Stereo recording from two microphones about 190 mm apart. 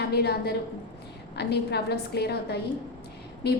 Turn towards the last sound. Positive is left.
turn(degrees=60)  # may be behind; listen again after turning